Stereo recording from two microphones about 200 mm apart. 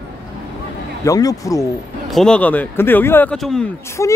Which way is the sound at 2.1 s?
5° left (ahead or behind).